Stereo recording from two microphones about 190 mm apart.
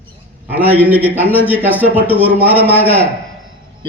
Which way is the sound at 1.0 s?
10° right (ahead or behind).